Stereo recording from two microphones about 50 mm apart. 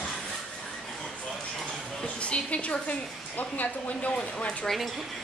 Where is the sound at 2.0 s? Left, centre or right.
Left.